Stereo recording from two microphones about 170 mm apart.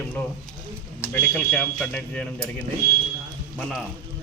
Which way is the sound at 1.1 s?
10° left (ahead or behind).